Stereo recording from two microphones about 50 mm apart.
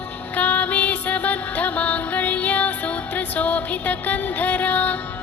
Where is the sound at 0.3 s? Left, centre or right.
Left.